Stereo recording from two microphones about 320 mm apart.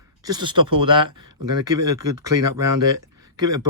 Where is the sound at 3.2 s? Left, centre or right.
Centre.